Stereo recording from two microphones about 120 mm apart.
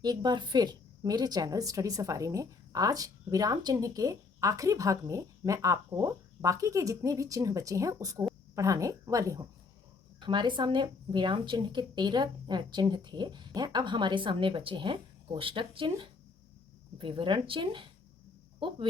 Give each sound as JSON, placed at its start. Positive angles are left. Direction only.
{"t": 0.0, "sound": "a woman's voice", "side_deg": -35}
{"t": 10.2, "sound": "a woman's voice", "side_deg": -40}